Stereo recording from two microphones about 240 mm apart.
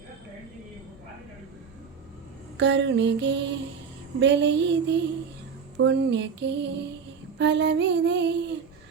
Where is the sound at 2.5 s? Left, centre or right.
Right.